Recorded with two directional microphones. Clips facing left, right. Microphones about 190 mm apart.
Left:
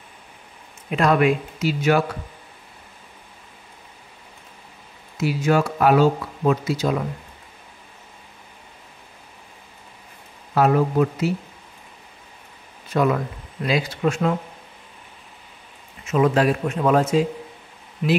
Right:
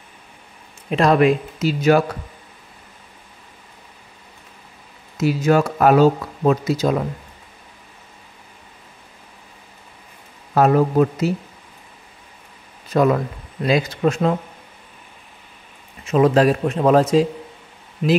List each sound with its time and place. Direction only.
0.8 s speech: 35° right (ahead or behind)
5.1 s speech: 40° right (ahead or behind)
10.5 s speech: 40° right (ahead or behind)
12.9 s speech: 40° right (ahead or behind)
16.1 s speech: 40° right (ahead or behind)